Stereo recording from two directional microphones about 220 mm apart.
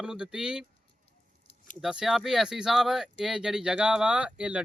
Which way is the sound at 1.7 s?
Centre (ahead or behind).